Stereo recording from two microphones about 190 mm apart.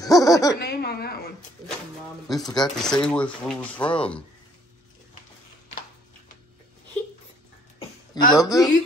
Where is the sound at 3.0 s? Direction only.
5° left (ahead or behind).